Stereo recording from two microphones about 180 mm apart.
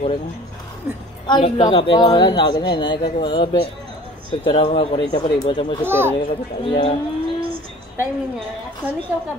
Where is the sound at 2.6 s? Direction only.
80° left.